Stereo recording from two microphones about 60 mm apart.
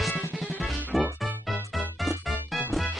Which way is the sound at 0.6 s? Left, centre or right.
Centre.